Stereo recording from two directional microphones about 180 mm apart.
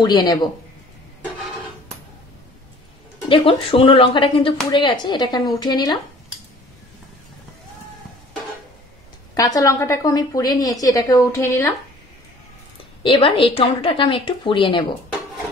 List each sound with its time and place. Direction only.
0.0 s a woman's voice: 25° left (ahead or behind)
3.3 s a woman's voice: 30° left (ahead or behind)
9.3 s a woman's voice: 20° left (ahead or behind)
13.0 s a woman's voice: 30° left (ahead or behind)